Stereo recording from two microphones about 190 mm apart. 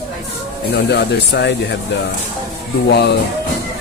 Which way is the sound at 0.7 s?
60° left (ahead or behind).